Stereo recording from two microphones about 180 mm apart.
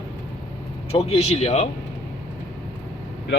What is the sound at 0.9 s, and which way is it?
Speech, 35° left (ahead or behind).